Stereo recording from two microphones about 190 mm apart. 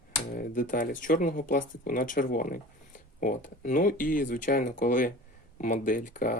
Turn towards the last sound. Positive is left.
turn(degrees=45)  # may be behind; listen again after turning